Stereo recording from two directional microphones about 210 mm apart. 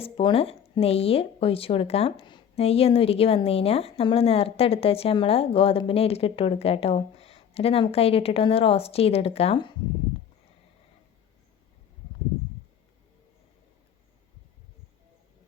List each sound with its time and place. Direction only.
0.0 s speech: 25° left (ahead or behind)